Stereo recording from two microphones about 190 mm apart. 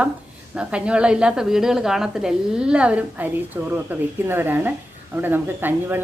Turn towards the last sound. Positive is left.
turn(degrees=-10)  # may be behind; listen again after turning